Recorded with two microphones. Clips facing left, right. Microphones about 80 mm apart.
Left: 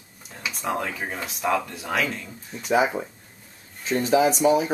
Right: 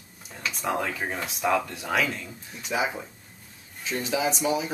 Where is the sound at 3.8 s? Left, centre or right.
Left.